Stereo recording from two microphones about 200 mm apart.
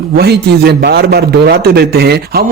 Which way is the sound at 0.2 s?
55° right (ahead or behind).